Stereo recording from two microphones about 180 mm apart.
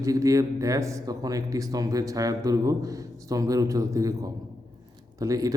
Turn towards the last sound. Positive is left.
turn(degrees=-20)  # may be behind; listen again after turning